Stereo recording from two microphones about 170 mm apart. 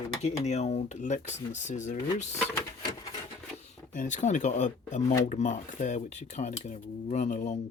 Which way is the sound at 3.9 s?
45° left (ahead or behind).